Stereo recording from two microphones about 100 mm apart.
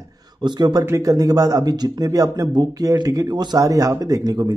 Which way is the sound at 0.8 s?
30° right (ahead or behind).